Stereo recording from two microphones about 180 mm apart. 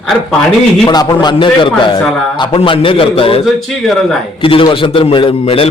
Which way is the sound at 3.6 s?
Centre (ahead or behind).